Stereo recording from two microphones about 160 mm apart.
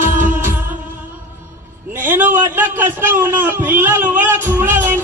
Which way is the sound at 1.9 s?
10° right (ahead or behind).